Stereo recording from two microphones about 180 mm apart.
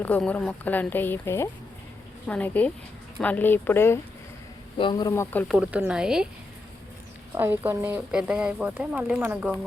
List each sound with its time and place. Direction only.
0.0 s speech: 10° left (ahead or behind)
4.8 s speech: 25° left (ahead or behind)
5.5 s speech: 5° right (ahead or behind)
7.3 s speech: 10° right (ahead or behind)